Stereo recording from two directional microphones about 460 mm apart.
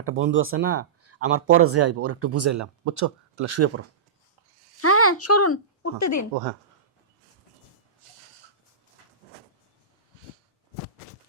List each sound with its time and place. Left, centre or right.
0.0 s speech: right
4.8 s speech: left
8.0 s a sound: right